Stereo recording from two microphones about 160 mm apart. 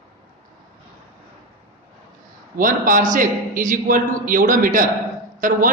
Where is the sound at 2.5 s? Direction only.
55° right (ahead or behind).